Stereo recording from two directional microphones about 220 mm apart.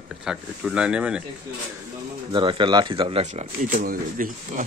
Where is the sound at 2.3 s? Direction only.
20° right (ahead or behind).